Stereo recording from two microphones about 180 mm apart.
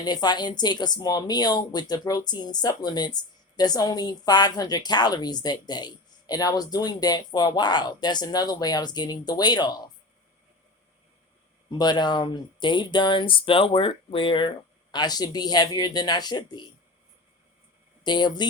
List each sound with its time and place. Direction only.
0.0 s a woman's voice: 25° left (ahead or behind)
11.8 s a woman's voice: 25° left (ahead or behind)
18.0 s a woman's voice: 25° left (ahead or behind)